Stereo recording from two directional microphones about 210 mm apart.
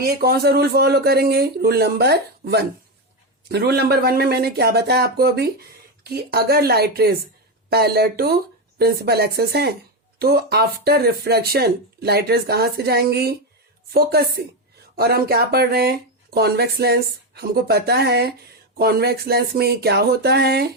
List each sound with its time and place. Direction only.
0.0 s speech: 45° right (ahead or behind)